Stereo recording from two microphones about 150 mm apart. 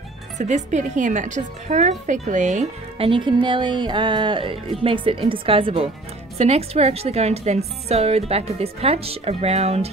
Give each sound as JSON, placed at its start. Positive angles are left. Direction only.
{"t": 0.4, "sound": "a woman's voice", "side_deg": -55}
{"t": 3.0, "sound": "a woman's voice", "side_deg": -35}